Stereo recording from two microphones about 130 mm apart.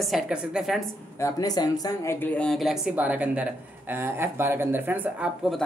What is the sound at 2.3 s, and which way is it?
Speech, 5° left (ahead or behind).